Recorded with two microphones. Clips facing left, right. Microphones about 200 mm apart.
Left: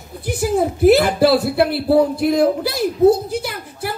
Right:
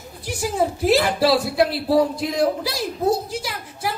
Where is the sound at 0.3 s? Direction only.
60° left (ahead or behind).